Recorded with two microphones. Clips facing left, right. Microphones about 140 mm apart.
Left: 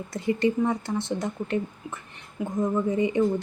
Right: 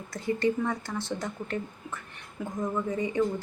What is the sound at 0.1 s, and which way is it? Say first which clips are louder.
Speech: left 3 dB; 20° left (ahead or behind).